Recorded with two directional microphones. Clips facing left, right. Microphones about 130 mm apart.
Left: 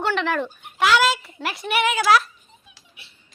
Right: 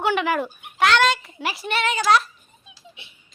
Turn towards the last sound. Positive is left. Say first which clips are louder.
# right 3 dB
turn(degrees=-25)  # may be behind; listen again after turning